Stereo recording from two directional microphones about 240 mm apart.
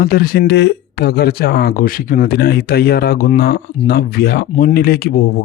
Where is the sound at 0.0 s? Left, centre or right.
Left.